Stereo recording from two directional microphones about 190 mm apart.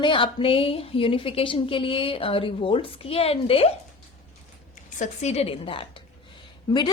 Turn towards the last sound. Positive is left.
turn(degrees=25)  # may be behind; listen again after turning